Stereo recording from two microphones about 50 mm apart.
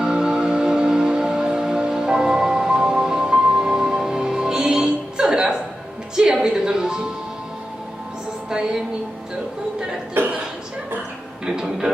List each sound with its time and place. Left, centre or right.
0.0 s music: centre
8.4 s music: centre
10.2 s chuckle: right
11.4 s a sound: centre